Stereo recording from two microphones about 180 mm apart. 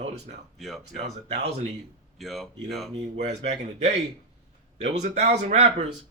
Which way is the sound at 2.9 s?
35° right (ahead or behind).